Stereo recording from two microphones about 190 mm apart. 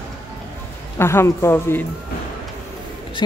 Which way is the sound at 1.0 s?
15° left (ahead or behind).